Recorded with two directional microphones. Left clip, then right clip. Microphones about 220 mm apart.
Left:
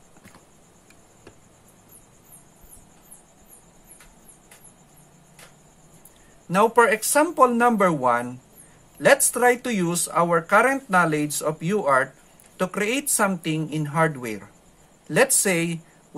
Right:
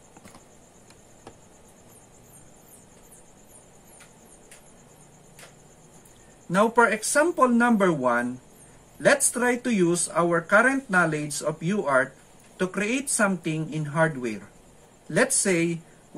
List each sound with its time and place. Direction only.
6.5 s speech: 40° left (ahead or behind)